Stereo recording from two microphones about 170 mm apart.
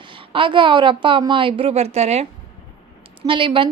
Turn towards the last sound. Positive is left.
turn(degrees=-30)  # may be behind; listen again after turning